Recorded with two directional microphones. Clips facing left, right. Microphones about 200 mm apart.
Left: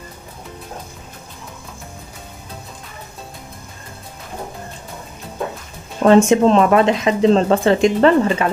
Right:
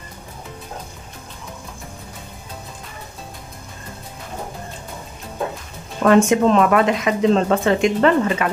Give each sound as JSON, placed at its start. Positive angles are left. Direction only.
{"t": 6.0, "sound": "speech", "side_deg": 25}